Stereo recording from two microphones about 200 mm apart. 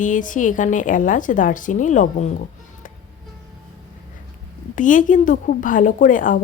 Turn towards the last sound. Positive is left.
turn(degrees=40)  # may be behind; listen again after turning